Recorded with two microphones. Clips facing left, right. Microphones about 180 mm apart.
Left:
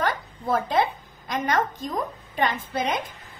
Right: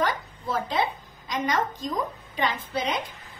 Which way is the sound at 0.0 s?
50° left (ahead or behind).